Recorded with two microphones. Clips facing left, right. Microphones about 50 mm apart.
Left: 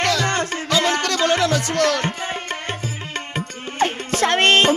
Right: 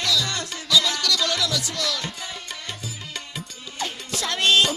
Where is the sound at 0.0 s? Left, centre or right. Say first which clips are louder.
Left 6 dB; left.